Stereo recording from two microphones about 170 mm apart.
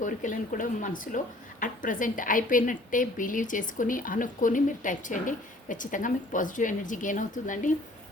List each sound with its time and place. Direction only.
0.0 s speech: 50° left (ahead or behind)